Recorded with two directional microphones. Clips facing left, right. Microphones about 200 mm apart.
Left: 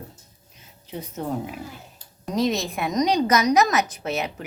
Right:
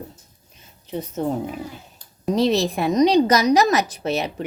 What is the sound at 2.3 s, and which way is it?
Speech, 30° right (ahead or behind).